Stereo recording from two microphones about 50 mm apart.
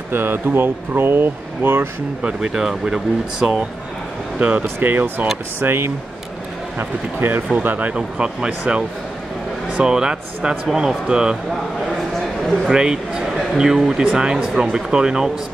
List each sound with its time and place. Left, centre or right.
0.1 s speech: right
2.4 s speech: centre
4.4 s speech: right
4.8 s speech: right
7.6 s speech: right
12.6 s speech: centre